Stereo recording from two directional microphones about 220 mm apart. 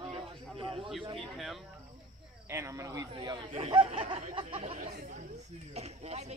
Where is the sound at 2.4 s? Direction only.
15° right (ahead or behind); by 4.9 s 30° right (ahead or behind).